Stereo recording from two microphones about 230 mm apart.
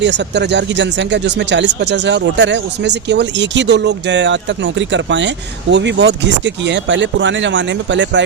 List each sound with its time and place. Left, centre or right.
0.0 s speech: right